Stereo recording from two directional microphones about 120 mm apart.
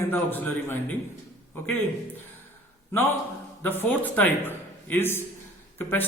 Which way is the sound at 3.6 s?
15° left (ahead or behind).